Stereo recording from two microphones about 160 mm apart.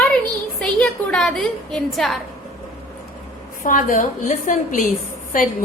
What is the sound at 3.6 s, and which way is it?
A woman's voice, 55° left (ahead or behind).